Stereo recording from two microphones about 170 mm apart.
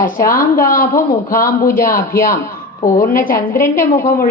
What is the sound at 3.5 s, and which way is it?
Speech, 15° left (ahead or behind).